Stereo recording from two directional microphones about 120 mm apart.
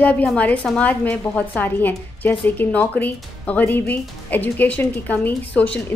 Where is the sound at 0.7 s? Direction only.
10° left (ahead or behind).